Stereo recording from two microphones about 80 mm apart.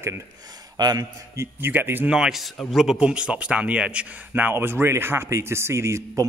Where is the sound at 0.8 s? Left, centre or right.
Right.